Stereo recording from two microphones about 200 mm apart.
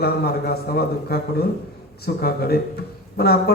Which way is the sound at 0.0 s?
50° left (ahead or behind).